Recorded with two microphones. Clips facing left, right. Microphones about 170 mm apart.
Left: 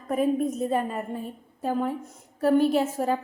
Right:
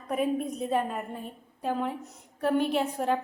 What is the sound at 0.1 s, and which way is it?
A woman's voice, centre (ahead or behind).